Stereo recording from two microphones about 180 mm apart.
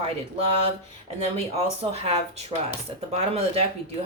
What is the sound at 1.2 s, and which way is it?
Speech, 35° right (ahead or behind).